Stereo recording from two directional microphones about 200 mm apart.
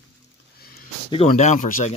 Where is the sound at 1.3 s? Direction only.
40° left (ahead or behind).